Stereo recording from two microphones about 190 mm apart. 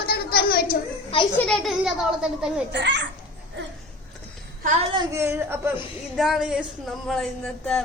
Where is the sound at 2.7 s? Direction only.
70° right (ahead or behind).